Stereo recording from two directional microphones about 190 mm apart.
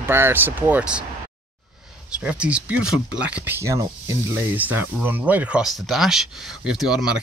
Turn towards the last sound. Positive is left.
turn(degrees=-5)  # may be behind; listen again after turning